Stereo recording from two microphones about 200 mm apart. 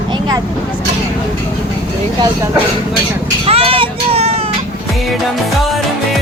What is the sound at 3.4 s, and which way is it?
Vehicle, 30° right (ahead or behind).